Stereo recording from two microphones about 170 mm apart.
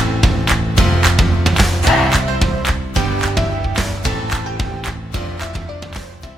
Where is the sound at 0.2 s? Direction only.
Centre (ahead or behind).